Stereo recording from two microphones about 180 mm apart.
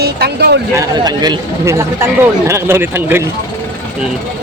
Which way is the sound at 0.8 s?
20° right (ahead or behind).